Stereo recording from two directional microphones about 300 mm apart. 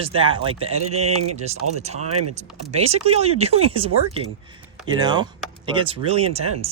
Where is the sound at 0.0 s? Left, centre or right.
Centre.